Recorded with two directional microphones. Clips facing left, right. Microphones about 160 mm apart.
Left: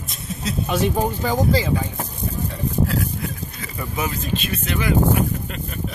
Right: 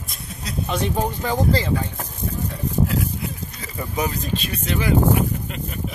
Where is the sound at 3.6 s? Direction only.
35° right (ahead or behind); by 5.8 s 20° right (ahead or behind).